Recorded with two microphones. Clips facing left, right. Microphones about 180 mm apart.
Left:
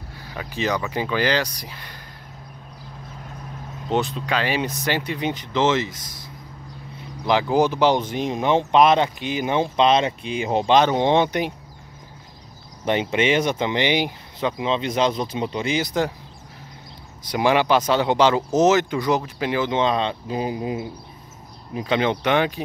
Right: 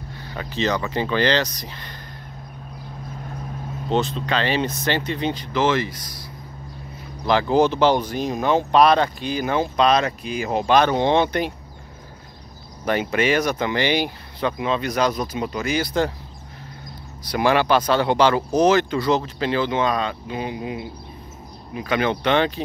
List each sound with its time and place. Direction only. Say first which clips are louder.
0.3 s speech: right 1 dB; 10° left (ahead or behind)
3.9 s speech: right 1 dB; 15° left (ahead or behind)
7.2 s speech: right 1 dB; 15° left (ahead or behind)
12.8 s speech: even; 20° left (ahead or behind)
17.3 s speech: even; 15° left (ahead or behind); by 20.7 s 35° left (ahead or behind)
21.8 s speech: even; 20° left (ahead or behind)